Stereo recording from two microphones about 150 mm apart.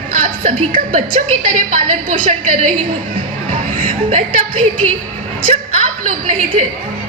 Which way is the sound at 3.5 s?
60° right (ahead or behind).